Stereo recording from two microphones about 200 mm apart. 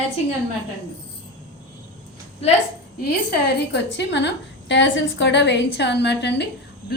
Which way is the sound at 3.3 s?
55° left (ahead or behind).